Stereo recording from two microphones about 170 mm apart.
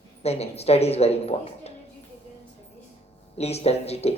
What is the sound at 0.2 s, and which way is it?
A woman's voice, 40° left (ahead or behind).